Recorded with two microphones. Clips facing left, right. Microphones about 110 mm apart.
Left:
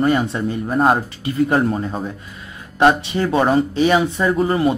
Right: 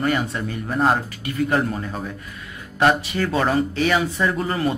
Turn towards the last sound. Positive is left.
turn(degrees=20)  # may be behind; listen again after turning